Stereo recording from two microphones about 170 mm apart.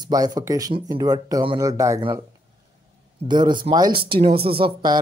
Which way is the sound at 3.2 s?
25° right (ahead or behind).